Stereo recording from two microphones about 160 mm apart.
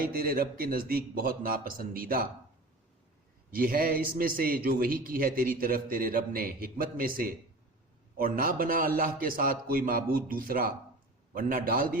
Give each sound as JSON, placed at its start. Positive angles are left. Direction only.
{"t": 0.0, "sound": "a man's voice", "side_deg": -65}
{"t": 3.5, "sound": "a man's voice", "side_deg": -65}